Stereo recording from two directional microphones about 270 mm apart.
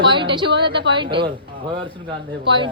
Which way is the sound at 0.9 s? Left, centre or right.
Centre.